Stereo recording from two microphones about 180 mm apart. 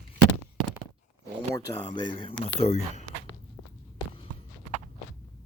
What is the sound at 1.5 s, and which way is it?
Speech, 25° left (ahead or behind).